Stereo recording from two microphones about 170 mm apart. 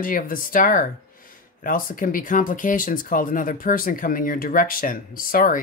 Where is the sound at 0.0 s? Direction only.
55° left (ahead or behind).